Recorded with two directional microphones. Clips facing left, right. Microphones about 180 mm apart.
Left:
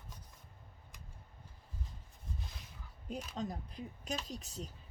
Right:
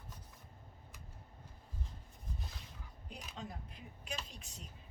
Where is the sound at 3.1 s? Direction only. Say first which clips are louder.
Left 8 dB; 40° left (ahead or behind).